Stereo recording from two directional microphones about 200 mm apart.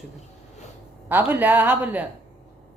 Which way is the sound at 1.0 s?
10° right (ahead or behind).